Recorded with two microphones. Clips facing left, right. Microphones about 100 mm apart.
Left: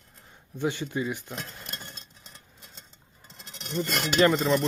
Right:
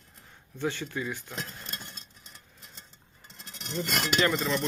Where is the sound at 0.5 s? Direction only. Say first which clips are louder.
Left 3 dB; 15° left (ahead or behind).